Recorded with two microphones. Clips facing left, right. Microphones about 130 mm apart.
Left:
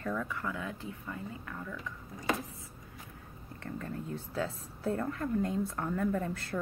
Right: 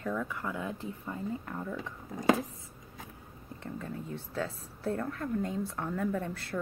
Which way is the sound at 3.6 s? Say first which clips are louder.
Even; 5° right (ahead or behind).